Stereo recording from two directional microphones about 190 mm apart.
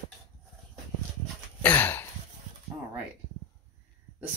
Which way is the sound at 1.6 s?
10° left (ahead or behind).